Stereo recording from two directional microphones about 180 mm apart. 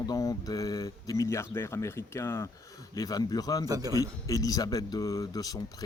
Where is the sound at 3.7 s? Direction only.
20° right (ahead or behind).